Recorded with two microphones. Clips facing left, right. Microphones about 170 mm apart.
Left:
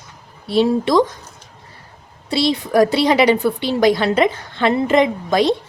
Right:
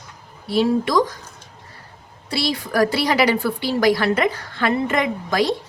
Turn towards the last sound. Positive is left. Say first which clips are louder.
# left 4 dB
turn(degrees=25)  # may be behind; listen again after turning